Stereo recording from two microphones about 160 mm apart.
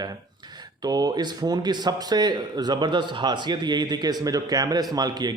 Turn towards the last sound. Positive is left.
turn(degrees=-25)  # may be behind; listen again after turning